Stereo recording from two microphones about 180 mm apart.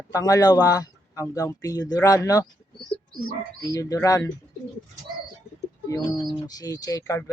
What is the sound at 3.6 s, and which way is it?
Speech, 20° left (ahead or behind).